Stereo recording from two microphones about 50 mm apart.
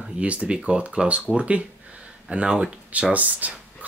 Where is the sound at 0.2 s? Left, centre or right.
Right.